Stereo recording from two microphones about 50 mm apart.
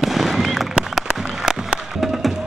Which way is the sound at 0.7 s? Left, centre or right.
Centre.